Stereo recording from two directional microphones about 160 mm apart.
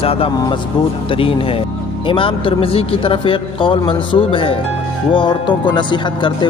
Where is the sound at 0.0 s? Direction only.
35° left (ahead or behind).